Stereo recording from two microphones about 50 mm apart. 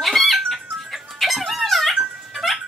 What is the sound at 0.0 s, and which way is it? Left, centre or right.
Music, centre.